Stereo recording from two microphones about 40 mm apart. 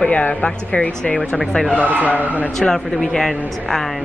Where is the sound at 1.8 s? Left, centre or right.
Right.